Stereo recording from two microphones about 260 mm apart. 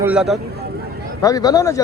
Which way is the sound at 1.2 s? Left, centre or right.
Centre.